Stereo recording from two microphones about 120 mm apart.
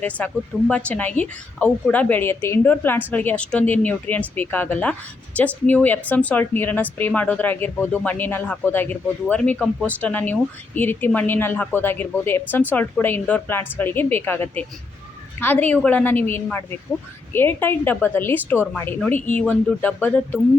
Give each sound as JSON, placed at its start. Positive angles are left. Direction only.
{"t": 0.2, "sound": "speech", "side_deg": 10}